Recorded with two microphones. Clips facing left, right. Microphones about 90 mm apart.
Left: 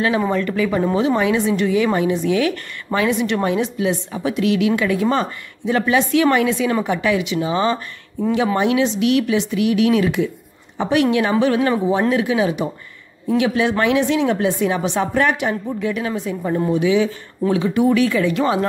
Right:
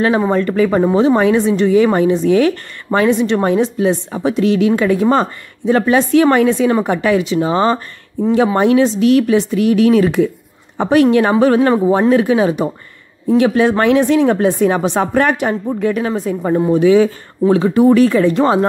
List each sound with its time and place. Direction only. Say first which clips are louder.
0.3 s a woman's voice: right 5 dB; 35° right (ahead or behind)